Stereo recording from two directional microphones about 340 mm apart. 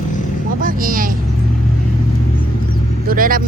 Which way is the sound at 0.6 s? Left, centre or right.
Right.